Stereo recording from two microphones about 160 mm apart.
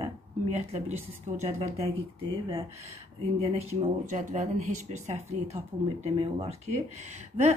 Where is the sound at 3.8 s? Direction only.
45° right (ahead or behind).